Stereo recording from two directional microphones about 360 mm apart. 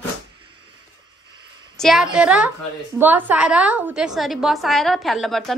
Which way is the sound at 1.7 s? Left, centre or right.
Centre.